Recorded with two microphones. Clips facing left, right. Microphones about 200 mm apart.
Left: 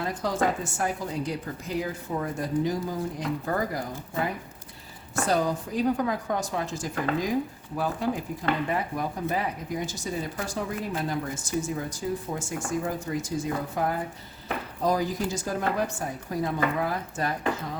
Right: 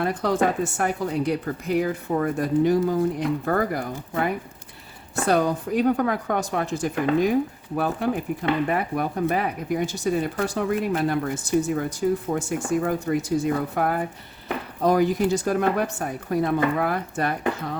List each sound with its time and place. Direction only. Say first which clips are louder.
0.0 s speech: right 5 dB; 65° right (ahead or behind)
5.2 s speech: right 4 dB; 65° right (ahead or behind)